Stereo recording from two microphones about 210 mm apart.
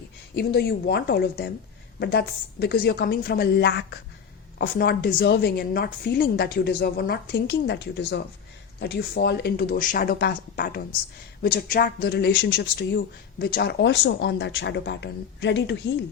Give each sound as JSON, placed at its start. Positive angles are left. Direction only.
{"t": 0.3, "sound": "a woman's voice", "side_deg": 50}